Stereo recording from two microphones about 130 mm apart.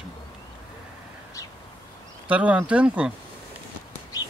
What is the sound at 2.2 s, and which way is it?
Speech, 10° right (ahead or behind).